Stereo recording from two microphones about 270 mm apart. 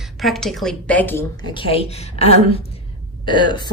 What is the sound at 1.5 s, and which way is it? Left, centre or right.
A woman's voice, left.